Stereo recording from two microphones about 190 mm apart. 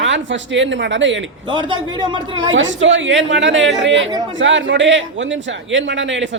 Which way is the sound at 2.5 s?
80° right.